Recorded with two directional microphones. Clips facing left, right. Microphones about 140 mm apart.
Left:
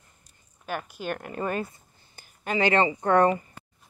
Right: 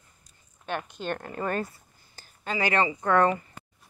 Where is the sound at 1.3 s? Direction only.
20° left (ahead or behind).